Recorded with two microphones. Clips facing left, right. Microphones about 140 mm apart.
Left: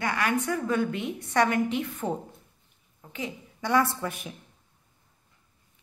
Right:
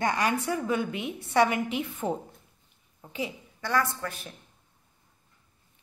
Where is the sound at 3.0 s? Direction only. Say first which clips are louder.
Right 1 dB; 20° right (ahead or behind).